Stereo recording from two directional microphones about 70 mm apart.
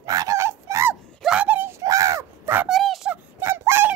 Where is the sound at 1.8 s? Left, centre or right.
Right.